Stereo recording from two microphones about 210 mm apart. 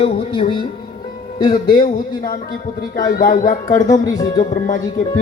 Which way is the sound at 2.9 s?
40° left (ahead or behind).